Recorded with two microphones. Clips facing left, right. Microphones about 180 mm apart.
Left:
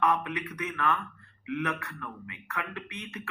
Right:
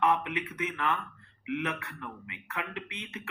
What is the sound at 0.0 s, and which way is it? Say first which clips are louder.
A man's voice: even; 20° right (ahead or behind).